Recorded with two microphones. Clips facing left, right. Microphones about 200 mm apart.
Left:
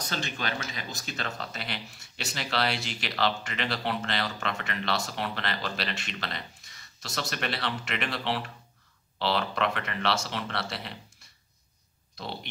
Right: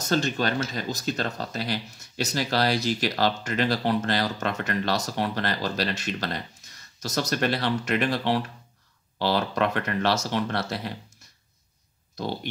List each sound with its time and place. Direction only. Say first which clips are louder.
0.0 s speech: right 9 dB; 45° right (ahead or behind)